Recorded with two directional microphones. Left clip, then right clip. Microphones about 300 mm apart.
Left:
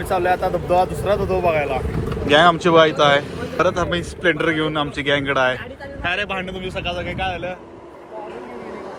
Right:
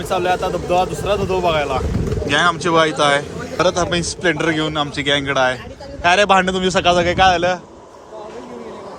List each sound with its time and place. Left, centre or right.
0.2 s speech: centre
1.4 s a man's voice: centre
2.2 s a man's voice: centre